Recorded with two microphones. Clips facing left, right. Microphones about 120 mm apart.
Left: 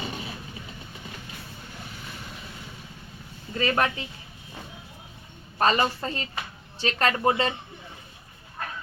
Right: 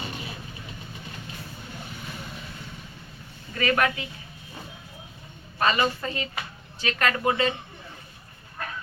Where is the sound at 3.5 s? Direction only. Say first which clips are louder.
Right 1 dB; 25° left (ahead or behind).